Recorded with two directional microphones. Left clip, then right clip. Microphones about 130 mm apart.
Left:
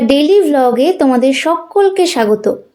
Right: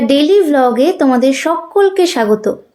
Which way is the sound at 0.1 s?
25° left (ahead or behind).